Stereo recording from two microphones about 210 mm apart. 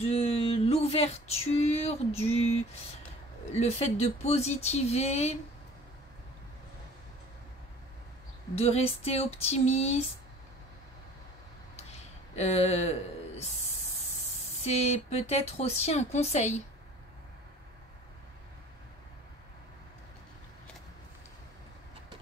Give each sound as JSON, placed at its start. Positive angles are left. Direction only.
{"t": 0.0, "sound": "female singing", "side_deg": 30}
{"t": 3.5, "sound": "speech", "side_deg": 30}
{"t": 8.5, "sound": "a sound", "side_deg": 30}
{"t": 12.4, "sound": "speech", "side_deg": 30}
{"t": 14.6, "sound": "speech", "side_deg": 30}